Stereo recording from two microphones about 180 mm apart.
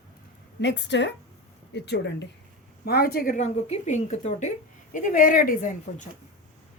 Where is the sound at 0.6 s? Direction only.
80° left.